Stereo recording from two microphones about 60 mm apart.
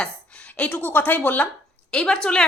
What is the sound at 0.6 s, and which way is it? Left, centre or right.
Speech, left.